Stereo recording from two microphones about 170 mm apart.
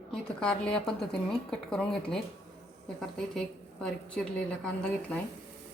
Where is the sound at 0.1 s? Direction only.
5° left (ahead or behind).